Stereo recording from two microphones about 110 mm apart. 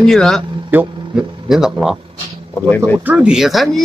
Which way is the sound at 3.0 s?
15° right (ahead or behind).